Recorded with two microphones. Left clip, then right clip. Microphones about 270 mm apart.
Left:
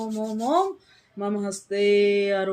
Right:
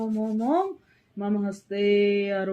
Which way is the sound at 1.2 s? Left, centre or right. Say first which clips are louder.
Left 2 dB; centre.